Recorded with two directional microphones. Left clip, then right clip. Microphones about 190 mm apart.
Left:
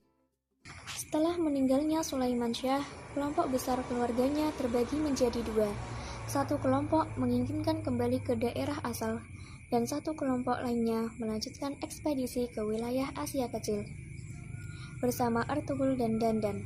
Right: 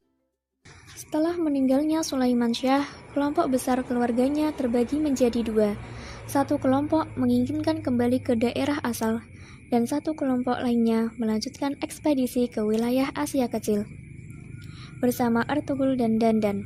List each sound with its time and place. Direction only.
1.1 s a woman's voice: 30° right (ahead or behind)
15.0 s a woman's voice: 40° right (ahead or behind)